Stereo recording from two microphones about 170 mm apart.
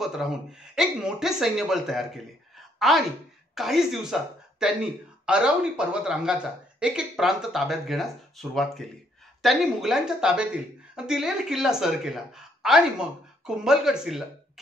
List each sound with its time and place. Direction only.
0.0 s speech: centre (ahead or behind)